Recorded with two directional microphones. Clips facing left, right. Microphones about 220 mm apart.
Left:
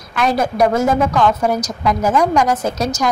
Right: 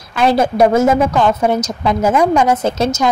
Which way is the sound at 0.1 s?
30° right (ahead or behind).